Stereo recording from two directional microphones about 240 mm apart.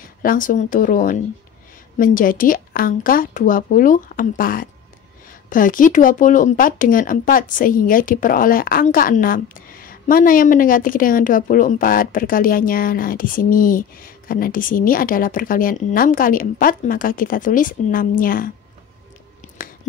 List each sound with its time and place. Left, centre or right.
0.2 s speech: left